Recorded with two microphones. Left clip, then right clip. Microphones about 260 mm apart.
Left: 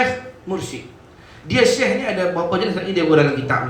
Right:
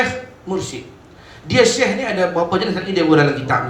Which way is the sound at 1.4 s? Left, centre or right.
Right.